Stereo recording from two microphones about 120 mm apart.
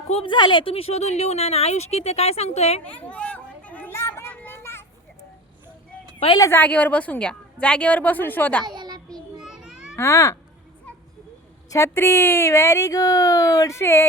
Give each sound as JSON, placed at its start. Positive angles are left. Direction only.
{"t": 0.1, "sound": "speech", "side_deg": 55}
{"t": 0.3, "sound": "speech", "side_deg": 40}
{"t": 2.8, "sound": "a sound", "side_deg": 10}
{"t": 6.1, "sound": "speech", "side_deg": 45}
{"t": 6.4, "sound": "a woman's voice", "side_deg": 15}
{"t": 8.6, "sound": "a sound", "side_deg": -35}
{"t": 9.4, "sound": "children playing", "side_deg": -5}
{"t": 9.9, "sound": "speech", "side_deg": 25}
{"t": 11.7, "sound": "a woman's voice", "side_deg": 20}